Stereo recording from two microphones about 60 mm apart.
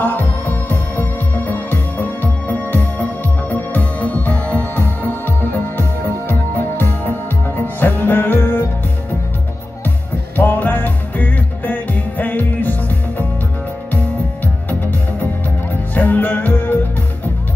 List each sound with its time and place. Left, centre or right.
0.0 s music: left
9.8 s music: left
14.4 s music: left